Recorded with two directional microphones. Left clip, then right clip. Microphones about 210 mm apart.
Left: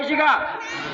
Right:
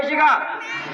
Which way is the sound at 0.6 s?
45° left (ahead or behind).